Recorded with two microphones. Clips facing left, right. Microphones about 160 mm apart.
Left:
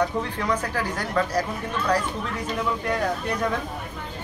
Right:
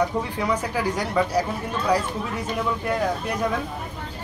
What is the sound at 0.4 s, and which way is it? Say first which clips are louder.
Speech: right 2 dB; 10° right (ahead or behind).